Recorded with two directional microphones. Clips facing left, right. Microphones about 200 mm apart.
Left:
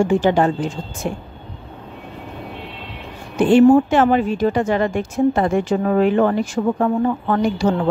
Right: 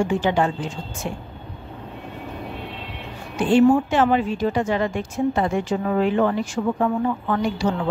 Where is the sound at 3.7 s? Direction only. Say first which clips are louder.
Left 4 dB; 45° left (ahead or behind).